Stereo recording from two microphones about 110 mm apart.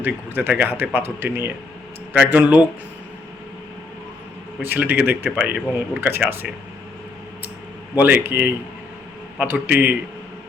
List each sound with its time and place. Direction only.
0.0 s speech: 15° right (ahead or behind)
4.6 s speech: 15° right (ahead or behind)
7.9 s speech: 15° right (ahead or behind)